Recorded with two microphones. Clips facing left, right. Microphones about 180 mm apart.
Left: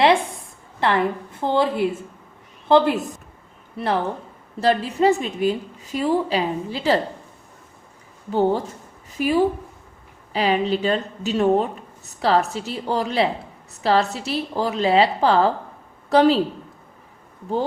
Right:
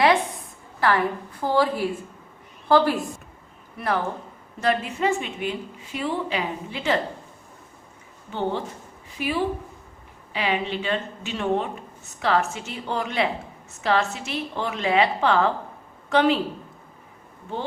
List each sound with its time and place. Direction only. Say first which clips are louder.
0.8 s a woman's voice: left 2 dB; 25° left (ahead or behind)
8.3 s a woman's voice: left 7 dB; 40° left (ahead or behind)